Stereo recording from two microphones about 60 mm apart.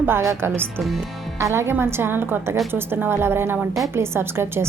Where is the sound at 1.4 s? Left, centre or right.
Right.